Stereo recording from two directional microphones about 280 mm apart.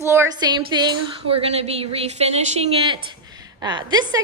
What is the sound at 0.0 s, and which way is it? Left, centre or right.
A woman's voice, centre.